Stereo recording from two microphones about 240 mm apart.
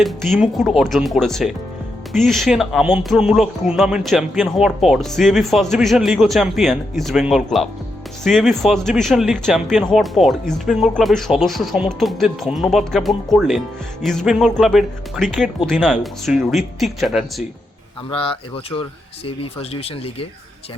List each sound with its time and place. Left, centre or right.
0.0 s speech: centre
18.1 s speech: left